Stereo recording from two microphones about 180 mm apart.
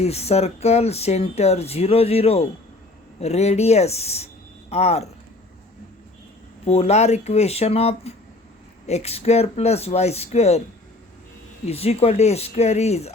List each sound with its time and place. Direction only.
0.0 s speech: 35° left (ahead or behind)
6.7 s speech: 35° left (ahead or behind)
11.6 s speech: 35° left (ahead or behind)